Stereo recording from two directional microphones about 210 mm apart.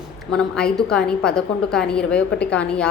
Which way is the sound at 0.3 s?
5° left (ahead or behind).